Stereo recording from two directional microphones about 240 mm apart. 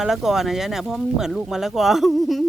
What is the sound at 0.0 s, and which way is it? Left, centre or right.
Speech, centre.